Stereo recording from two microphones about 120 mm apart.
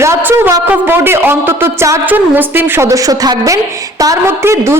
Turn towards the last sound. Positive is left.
turn(degrees=-20)  # may be behind; listen again after turning